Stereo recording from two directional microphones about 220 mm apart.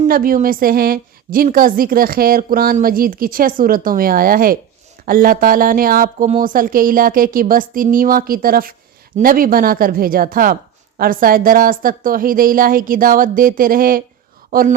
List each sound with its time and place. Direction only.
0.0 s speech: 40° right (ahead or behind)